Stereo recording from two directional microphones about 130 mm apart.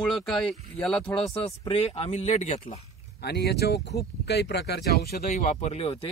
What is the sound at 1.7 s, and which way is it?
Speech, 50° left (ahead or behind).